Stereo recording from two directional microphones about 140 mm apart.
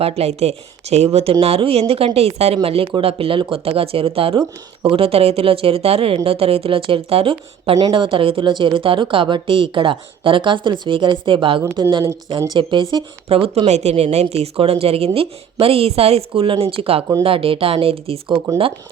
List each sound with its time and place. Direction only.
0.0 s speech: 45° right (ahead or behind)
13.2 s speech: 45° right (ahead or behind)